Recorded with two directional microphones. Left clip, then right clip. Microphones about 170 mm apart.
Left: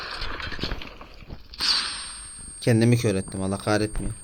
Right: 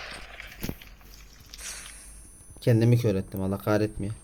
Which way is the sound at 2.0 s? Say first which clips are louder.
Left 15 dB; 40° left (ahead or behind).